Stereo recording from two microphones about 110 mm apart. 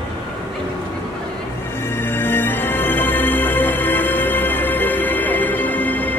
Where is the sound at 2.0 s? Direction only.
20° left (ahead or behind).